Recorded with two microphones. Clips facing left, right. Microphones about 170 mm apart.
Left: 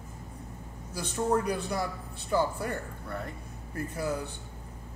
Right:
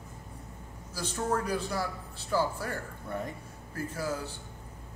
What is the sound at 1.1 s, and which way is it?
Speech, 15° left (ahead or behind).